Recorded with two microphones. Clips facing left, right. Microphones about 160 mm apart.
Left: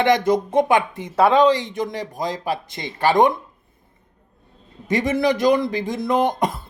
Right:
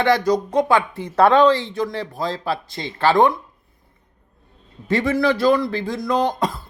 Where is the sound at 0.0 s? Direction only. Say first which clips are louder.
Even; 20° left (ahead or behind).